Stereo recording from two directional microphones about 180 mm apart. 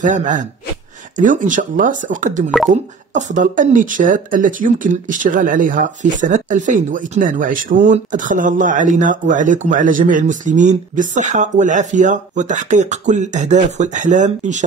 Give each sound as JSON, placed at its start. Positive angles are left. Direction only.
{"t": 0.0, "sound": "speech", "side_deg": -45}